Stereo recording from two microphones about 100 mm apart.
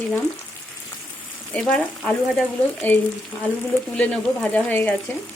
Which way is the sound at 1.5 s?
10° left (ahead or behind).